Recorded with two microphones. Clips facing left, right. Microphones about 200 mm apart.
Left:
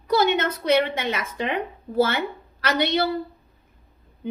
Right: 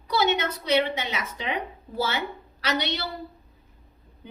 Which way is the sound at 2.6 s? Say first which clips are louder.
Left 6 dB; 55° left (ahead or behind).